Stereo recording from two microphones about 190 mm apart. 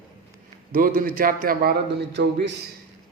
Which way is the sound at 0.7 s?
50° right (ahead or behind).